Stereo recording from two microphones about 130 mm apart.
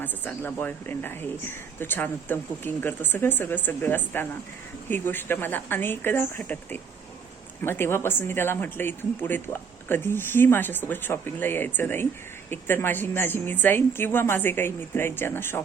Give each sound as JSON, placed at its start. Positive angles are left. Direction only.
{"t": 0.0, "sound": "speech", "side_deg": 15}